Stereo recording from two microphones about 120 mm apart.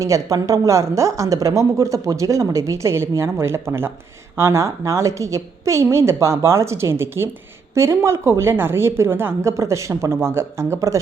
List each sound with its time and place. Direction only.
0.0 s a woman's voice: 30° right (ahead or behind)